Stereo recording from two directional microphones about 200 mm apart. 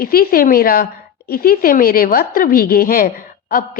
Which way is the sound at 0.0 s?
45° left (ahead or behind).